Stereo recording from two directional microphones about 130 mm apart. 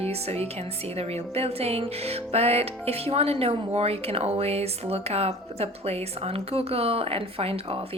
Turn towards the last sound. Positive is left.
turn(degrees=-50)  # may be behind; listen again after turning